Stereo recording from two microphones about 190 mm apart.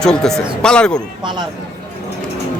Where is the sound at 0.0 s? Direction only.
5° left (ahead or behind).